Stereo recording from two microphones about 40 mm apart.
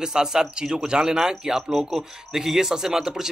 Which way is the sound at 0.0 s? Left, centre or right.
Centre.